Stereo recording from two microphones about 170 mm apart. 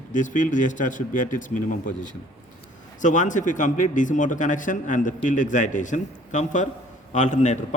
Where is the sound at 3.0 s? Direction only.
50° left (ahead or behind).